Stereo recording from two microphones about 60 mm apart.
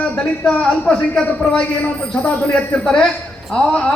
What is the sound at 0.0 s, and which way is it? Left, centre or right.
A man's voice, left.